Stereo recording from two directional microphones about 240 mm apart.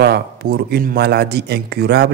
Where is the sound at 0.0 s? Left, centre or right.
Right.